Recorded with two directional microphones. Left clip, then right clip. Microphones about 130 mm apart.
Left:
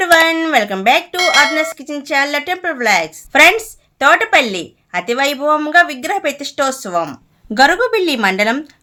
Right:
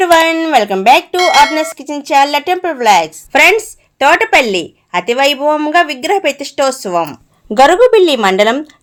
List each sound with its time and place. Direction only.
0.0 s speech: 5° right (ahead or behind)
1.1 s a woman's voice: centre (ahead or behind); by 8.7 s 20° right (ahead or behind)